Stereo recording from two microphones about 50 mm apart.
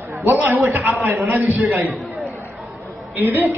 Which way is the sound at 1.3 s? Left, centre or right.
Right.